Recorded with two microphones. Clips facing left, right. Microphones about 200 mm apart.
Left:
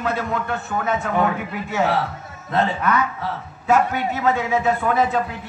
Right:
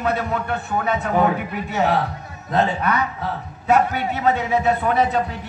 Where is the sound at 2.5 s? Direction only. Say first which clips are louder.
Right 1 dB; 35° right (ahead or behind).